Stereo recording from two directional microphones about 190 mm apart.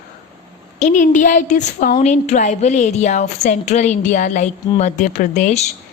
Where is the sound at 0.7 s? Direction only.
40° left (ahead or behind).